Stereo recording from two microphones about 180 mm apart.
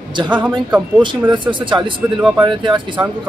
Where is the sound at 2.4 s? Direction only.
25° right (ahead or behind).